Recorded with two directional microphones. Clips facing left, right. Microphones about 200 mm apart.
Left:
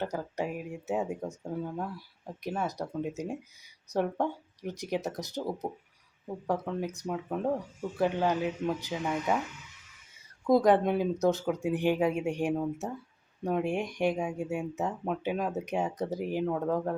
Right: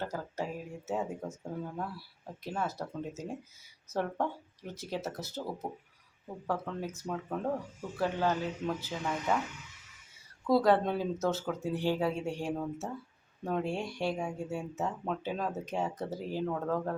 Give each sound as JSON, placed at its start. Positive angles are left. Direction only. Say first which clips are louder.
{"t": 0.0, "sound": "speech", "louder": "left 4 dB", "side_deg": 15}
{"t": 10.4, "sound": "speech", "louder": "left 3 dB", "side_deg": 15}